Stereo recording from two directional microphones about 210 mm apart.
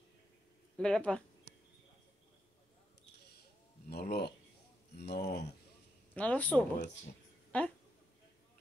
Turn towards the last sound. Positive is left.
turn(degrees=5)  # may be behind; listen again after turning